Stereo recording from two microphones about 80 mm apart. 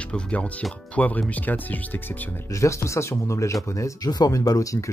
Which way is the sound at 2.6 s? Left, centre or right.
Left.